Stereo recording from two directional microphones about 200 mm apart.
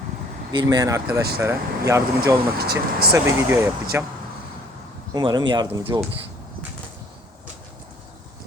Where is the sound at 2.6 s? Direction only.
50° right (ahead or behind).